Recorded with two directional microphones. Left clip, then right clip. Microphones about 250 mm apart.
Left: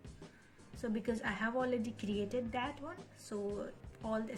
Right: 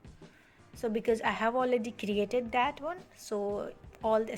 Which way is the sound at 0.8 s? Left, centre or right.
Right.